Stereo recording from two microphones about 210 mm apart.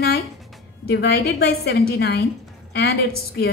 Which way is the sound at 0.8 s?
50° left (ahead or behind).